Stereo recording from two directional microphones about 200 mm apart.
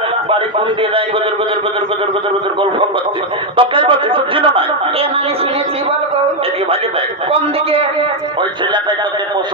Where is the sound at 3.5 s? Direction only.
25° right (ahead or behind).